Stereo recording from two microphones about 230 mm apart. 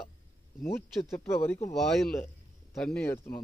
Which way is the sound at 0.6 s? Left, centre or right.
Centre.